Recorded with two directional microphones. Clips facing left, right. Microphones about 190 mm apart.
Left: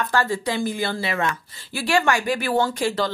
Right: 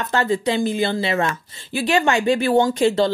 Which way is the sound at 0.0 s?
20° right (ahead or behind).